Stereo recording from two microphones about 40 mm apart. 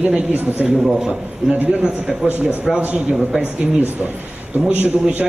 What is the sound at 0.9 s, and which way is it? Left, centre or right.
A woman's voice, centre.